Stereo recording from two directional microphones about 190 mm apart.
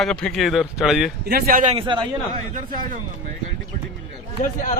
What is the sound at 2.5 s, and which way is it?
Speech, 45° right (ahead or behind).